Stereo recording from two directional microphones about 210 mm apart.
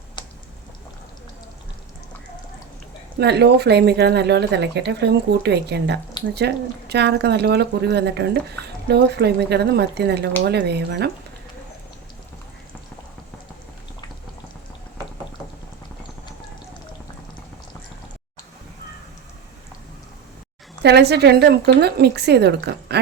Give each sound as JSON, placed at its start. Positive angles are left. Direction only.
{"t": 0.2, "sound": "a sound", "side_deg": 20}
{"t": 3.2, "sound": "speech", "side_deg": -55}
{"t": 20.8, "sound": "speech", "side_deg": -50}